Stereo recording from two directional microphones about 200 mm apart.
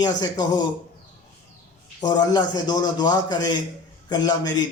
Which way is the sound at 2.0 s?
20° left (ahead or behind).